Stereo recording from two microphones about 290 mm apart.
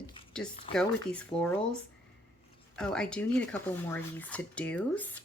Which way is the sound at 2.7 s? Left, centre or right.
Centre.